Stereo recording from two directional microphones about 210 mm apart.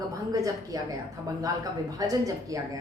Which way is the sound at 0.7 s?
15° right (ahead or behind).